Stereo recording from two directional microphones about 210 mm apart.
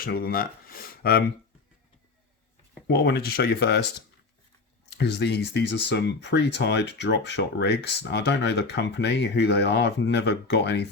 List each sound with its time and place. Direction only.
0.0 s speech: 45° left (ahead or behind)
2.8 s speech: 50° left (ahead or behind)
4.9 s speech: 50° left (ahead or behind)